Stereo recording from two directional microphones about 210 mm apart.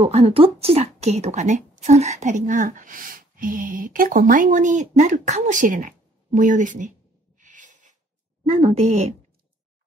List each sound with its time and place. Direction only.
0.0 s a woman's voice: 30° right (ahead or behind)
7.3 s a sound: 35° right (ahead or behind)
8.5 s a woman's voice: 30° right (ahead or behind)